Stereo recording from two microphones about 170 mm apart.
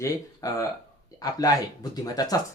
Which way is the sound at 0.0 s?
20° left (ahead or behind).